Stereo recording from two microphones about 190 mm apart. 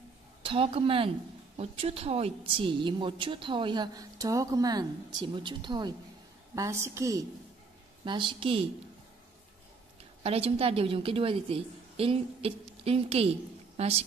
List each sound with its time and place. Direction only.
0.4 s a woman's voice: 30° right (ahead or behind)
10.2 s a woman's voice: 30° right (ahead or behind)